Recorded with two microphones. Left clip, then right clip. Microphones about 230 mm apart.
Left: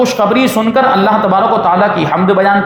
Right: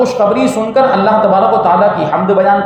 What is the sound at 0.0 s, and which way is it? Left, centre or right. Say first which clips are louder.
Speech: even; left.